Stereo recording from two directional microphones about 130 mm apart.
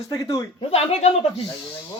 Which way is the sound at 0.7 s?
55° left (ahead or behind).